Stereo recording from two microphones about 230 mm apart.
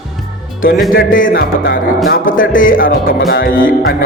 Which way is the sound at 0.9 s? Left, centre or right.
Left.